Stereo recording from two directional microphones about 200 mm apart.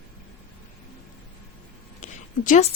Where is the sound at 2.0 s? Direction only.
40° left (ahead or behind).